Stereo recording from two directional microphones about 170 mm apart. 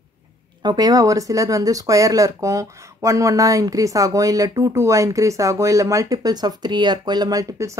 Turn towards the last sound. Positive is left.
turn(degrees=-20)  # may be behind; listen again after turning